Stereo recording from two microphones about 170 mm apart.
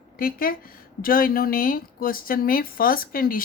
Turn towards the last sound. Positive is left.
turn(degrees=60)  # may be behind; listen again after turning